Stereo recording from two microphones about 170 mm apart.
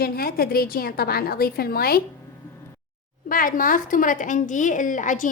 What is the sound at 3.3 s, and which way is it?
Speech, 55° left (ahead or behind).